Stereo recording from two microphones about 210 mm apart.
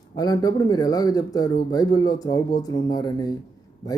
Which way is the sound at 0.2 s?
15° left (ahead or behind).